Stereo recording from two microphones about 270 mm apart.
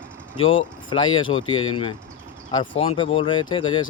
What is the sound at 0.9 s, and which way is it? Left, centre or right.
Speech, centre.